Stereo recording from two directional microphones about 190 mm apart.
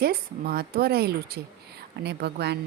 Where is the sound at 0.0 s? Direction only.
55° right (ahead or behind).